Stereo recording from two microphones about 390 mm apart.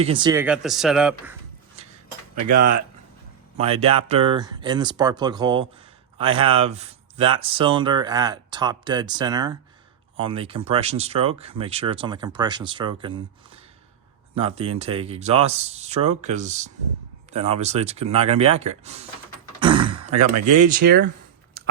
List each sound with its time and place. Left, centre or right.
0.0 s speech: centre
3.6 s speech: centre
14.3 s speech: centre
19.5 s throat clearing: centre
20.6 s speech: right
21.6 s chewing: right